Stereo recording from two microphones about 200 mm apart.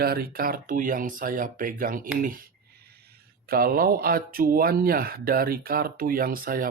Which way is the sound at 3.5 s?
45° right (ahead or behind).